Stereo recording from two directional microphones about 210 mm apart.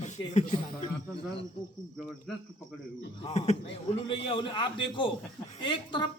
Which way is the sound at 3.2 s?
30° left (ahead or behind).